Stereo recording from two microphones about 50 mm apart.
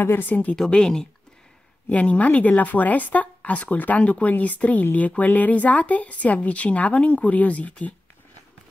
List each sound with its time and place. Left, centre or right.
0.2 s speech: left
0.6 s speech: centre
1.9 s speech: left